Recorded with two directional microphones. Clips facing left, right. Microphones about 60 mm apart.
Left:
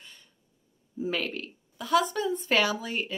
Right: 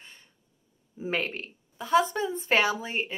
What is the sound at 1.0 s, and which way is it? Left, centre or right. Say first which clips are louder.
Speech: right 1 dB; right.